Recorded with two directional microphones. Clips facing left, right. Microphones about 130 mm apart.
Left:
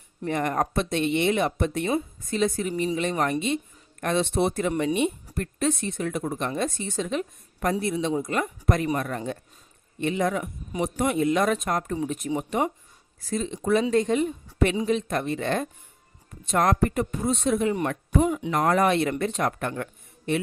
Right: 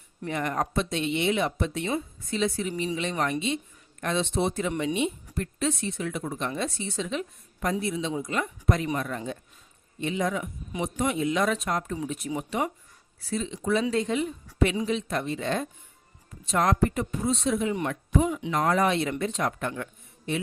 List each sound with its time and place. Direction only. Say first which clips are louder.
0.3 s speech: left 3 dB; 45° left (ahead or behind)